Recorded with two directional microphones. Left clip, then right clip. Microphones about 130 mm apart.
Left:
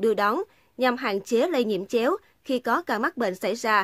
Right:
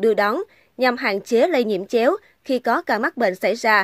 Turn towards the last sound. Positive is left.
turn(degrees=-20)  # may be behind; listen again after turning